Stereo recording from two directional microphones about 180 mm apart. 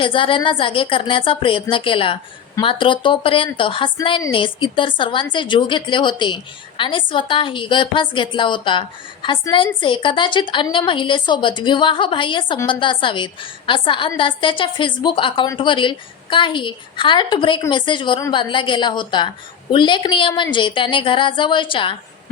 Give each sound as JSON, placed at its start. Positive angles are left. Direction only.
{"t": 0.0, "sound": "a woman's voice", "side_deg": 30}